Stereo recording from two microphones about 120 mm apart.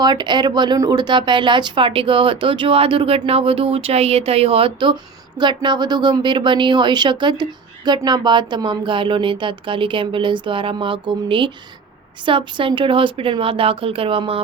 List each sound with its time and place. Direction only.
0.0 s speech: 35° right (ahead or behind)